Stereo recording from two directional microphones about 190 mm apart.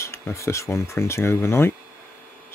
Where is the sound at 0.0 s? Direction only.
15° left (ahead or behind).